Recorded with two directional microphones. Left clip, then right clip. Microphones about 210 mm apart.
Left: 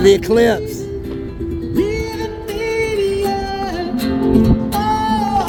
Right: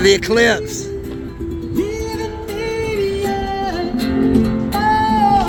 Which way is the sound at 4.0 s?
40° left (ahead or behind).